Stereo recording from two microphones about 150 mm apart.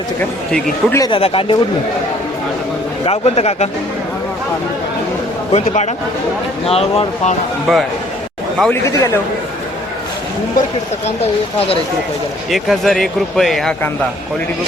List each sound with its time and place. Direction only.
0.2 s speech: 10° left (ahead or behind)
1.0 s speech: 35° left (ahead or behind)
3.0 s speech: 45° left (ahead or behind)
5.5 s speech: 45° left (ahead or behind)
7.7 s speech: centre (ahead or behind)
8.7 s a man's voice: 20° left (ahead or behind)
12.5 s speech: centre (ahead or behind)